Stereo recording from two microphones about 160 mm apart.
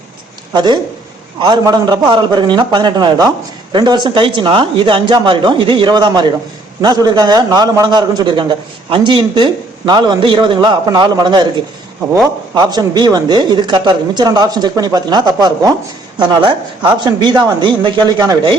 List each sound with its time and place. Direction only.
0.5 s a man's voice: 25° right (ahead or behind)